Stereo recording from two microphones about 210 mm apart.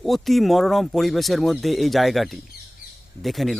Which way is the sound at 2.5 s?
50° left (ahead or behind).